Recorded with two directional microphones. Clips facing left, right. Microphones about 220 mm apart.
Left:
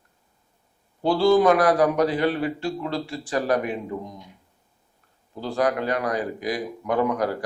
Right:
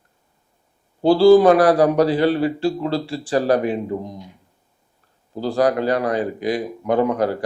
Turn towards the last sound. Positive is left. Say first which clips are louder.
# right 4 dB
turn(degrees=-30)  # may be behind; listen again after turning